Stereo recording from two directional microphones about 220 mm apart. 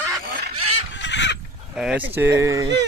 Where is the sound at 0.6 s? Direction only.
30° right (ahead or behind).